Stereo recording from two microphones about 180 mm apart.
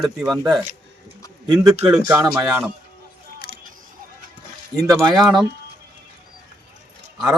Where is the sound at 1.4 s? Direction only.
20° right (ahead or behind).